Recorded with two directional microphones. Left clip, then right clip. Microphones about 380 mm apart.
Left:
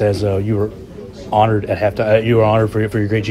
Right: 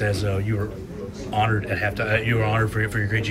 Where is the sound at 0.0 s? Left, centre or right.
Centre.